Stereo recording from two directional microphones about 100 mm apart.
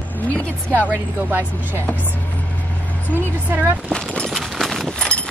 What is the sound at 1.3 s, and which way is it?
Speech, 20° right (ahead or behind).